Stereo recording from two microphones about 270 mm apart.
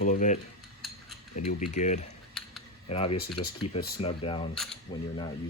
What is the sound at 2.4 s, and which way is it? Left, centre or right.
Computer keyboard, centre.